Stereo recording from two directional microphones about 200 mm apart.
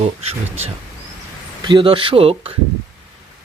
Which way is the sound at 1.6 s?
25° right (ahead or behind).